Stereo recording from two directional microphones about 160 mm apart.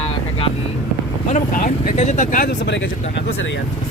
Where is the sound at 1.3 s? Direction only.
55° left (ahead or behind).